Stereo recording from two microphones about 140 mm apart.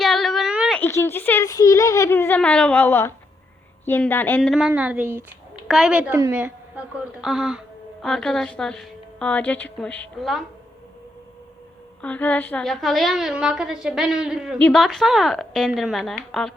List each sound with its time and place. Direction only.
0.0 s a sound: centre (ahead or behind)
0.9 s speech: 20° left (ahead or behind); by 4.7 s centre (ahead or behind)
4.7 s a woman's voice: 10° right (ahead or behind)
12.0 s a woman's voice: 10° left (ahead or behind)